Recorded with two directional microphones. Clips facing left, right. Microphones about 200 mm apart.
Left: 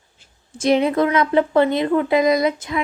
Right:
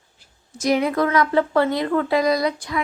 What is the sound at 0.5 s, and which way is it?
A woman's voice, 25° left (ahead or behind).